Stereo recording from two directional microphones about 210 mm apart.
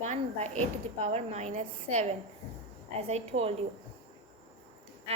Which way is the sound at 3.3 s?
35° right (ahead or behind).